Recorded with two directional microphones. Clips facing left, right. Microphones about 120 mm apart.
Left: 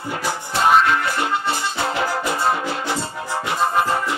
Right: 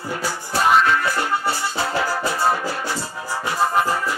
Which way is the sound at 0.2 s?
20° left (ahead or behind).